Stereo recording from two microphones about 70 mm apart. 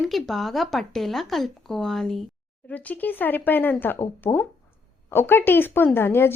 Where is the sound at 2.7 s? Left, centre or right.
Left.